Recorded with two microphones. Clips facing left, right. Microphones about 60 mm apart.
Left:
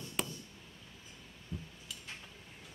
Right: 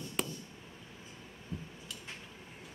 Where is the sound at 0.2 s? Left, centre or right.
Centre.